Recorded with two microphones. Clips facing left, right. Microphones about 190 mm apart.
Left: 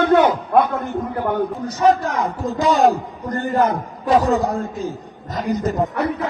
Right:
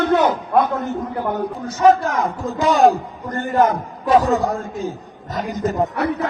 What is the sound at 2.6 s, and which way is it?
Speech, 40° left (ahead or behind).